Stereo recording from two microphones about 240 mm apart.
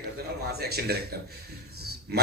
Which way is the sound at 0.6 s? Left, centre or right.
Right.